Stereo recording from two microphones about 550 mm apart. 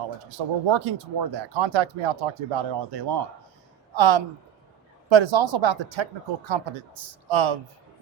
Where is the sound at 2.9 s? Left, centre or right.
Right.